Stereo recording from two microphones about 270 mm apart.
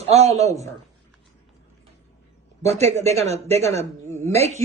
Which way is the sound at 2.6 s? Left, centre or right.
Right.